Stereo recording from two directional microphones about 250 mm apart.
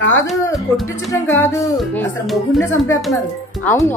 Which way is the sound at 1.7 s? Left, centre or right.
Centre.